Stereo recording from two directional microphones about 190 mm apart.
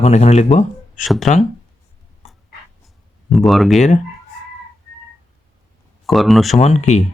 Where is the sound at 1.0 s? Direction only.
Centre (ahead or behind).